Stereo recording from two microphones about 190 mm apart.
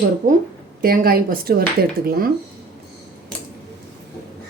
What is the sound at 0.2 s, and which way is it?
Speech, 45° right (ahead or behind).